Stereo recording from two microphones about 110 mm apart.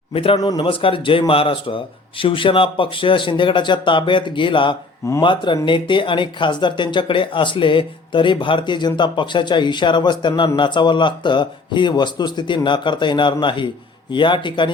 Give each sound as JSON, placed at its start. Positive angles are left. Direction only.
{"t": 0.1, "sound": "speech", "side_deg": 60}
{"t": 0.3, "sound": "a man's voice", "side_deg": 40}
{"t": 0.6, "sound": "a man's voice", "side_deg": 55}